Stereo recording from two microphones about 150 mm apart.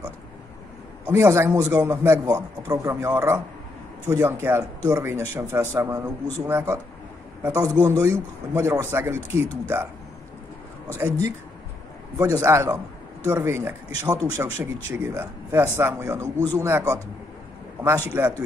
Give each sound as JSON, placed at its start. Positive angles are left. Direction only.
{"t": 1.0, "sound": "a man's voice", "side_deg": -20}
{"t": 11.0, "sound": "a man's voice", "side_deg": -20}
{"t": 14.6, "sound": "speech", "side_deg": -15}